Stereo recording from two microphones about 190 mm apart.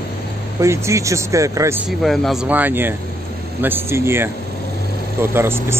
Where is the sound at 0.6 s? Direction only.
15° right (ahead or behind).